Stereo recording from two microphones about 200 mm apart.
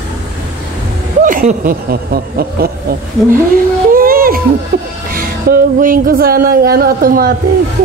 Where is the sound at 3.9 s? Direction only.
45° right (ahead or behind).